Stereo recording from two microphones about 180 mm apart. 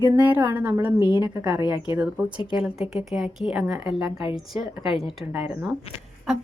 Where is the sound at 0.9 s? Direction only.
25° left (ahead or behind).